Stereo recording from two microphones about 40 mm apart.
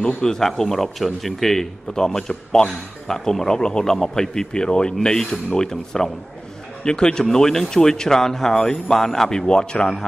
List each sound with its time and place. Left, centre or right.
0.0 s a man's voice: centre